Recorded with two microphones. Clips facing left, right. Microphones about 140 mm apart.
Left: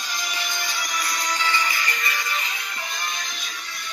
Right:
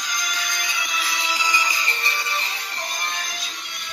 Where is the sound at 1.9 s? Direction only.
30° right (ahead or behind).